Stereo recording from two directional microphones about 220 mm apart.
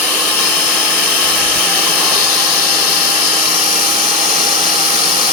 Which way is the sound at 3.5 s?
30° right (ahead or behind).